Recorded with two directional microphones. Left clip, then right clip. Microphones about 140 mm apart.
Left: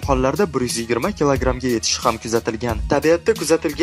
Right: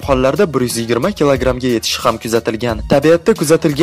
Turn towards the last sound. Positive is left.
turn(degrees=-30)  # may be behind; listen again after turning